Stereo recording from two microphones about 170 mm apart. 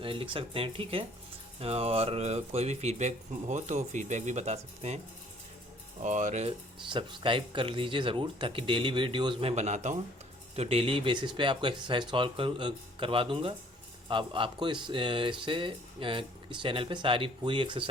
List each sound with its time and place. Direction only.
0.0 s speech: 30° right (ahead or behind)
6.0 s speech: 45° right (ahead or behind)
6.8 s speech: 30° right (ahead or behind)